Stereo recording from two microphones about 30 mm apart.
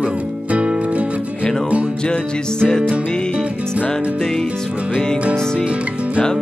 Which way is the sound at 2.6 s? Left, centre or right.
Left.